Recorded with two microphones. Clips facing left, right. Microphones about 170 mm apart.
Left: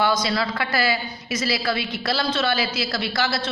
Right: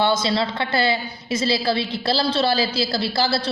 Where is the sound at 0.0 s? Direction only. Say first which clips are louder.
Right 2 dB; 25° right (ahead or behind).